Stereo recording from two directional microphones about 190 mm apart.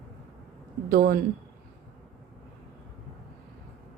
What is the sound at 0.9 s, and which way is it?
Speech, 50° right (ahead or behind).